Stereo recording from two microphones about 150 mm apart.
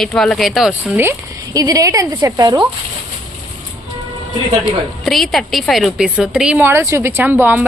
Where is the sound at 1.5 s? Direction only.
25° right (ahead or behind).